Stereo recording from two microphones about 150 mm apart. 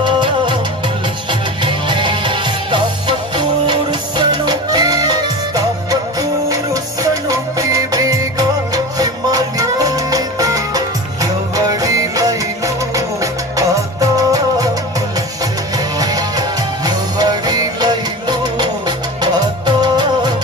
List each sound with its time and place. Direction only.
0.0 s music: 30° right (ahead or behind)
1.6 s music: 30° right (ahead or behind)